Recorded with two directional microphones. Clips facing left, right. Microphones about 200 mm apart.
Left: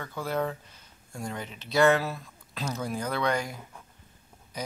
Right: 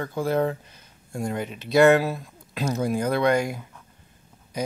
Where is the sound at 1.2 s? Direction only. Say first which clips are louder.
Right 8 dB; 50° right (ahead or behind).